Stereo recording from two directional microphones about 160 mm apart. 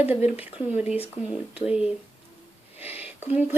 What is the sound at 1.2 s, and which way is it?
Speech, 10° right (ahead or behind).